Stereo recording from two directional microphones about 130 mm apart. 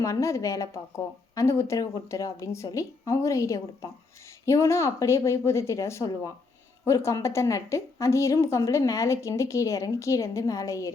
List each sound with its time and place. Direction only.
0.0 s a woman's voice: 25° left (ahead or behind)